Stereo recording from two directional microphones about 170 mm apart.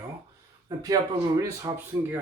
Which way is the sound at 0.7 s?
25° right (ahead or behind).